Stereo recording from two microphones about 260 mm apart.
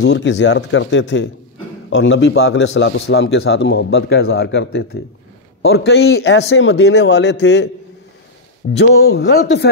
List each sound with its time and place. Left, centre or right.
0.0 s a man's voice: left
8.7 s a man's voice: left